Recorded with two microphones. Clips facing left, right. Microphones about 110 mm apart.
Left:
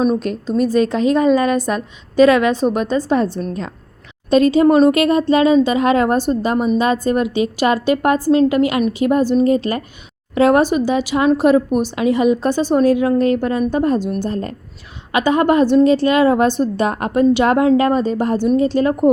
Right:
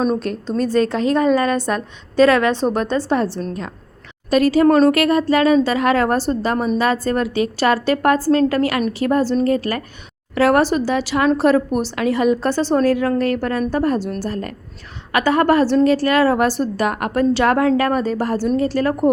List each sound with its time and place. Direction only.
0.2 s a woman's voice: 15° left (ahead or behind)
4.3 s a woman's voice: 25° left (ahead or behind)